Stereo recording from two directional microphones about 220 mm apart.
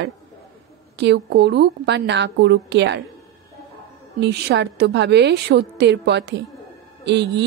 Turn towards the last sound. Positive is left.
turn(degrees=-50)  # may be behind; listen again after turning